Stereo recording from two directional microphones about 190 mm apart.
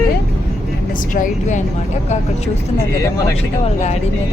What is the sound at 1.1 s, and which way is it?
Speech, 45° left (ahead or behind).